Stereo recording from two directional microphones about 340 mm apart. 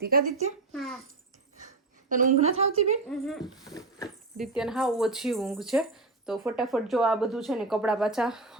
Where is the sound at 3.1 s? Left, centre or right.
Centre.